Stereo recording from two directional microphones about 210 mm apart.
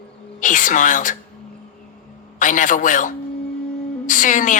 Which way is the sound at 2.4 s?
40° left (ahead or behind).